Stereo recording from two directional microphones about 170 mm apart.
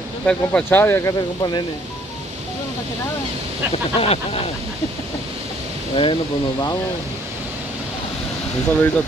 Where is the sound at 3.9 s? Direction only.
35° left (ahead or behind).